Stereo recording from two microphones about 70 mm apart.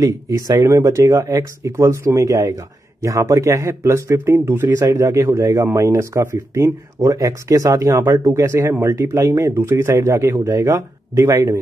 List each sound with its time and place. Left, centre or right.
0.0 s speech: right
9.5 s speech: right